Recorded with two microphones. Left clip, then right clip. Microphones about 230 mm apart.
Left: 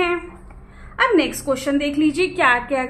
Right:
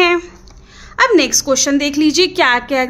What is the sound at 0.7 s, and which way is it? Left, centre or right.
A woman's voice, right.